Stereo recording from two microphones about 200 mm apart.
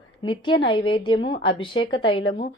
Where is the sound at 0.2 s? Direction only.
25° left (ahead or behind).